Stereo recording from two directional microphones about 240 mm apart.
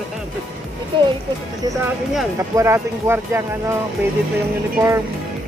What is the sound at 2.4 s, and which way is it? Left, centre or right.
Speech, centre.